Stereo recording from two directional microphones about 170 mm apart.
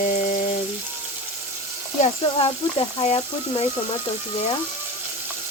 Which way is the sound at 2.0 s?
30° left (ahead or behind).